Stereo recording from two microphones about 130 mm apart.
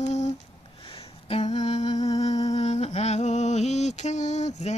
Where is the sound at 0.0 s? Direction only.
60° left (ahead or behind).